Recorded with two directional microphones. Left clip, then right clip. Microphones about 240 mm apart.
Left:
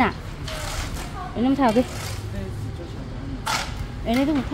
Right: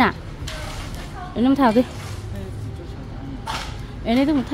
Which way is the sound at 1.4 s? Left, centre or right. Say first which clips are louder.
Right 3 dB; centre.